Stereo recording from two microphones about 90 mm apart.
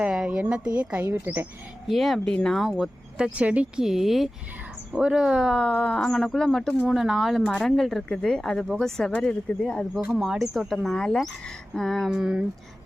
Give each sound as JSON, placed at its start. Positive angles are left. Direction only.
{"t": 0.0, "sound": "speech", "side_deg": -10}
{"t": 1.9, "sound": "speech", "side_deg": 0}
{"t": 2.6, "sound": "speech", "side_deg": -5}
{"t": 5.5, "sound": "speech", "side_deg": 10}
{"t": 8.6, "sound": "speech", "side_deg": -5}
{"t": 9.0, "sound": "speech", "side_deg": 5}
{"t": 10.1, "sound": "speech", "side_deg": 0}
{"t": 12.1, "sound": "speech", "side_deg": -10}